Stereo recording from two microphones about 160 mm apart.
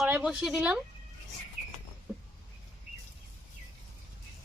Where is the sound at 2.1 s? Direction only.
5° right (ahead or behind).